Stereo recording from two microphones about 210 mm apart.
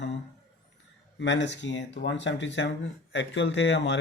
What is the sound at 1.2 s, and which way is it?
A man's voice, 60° left (ahead or behind).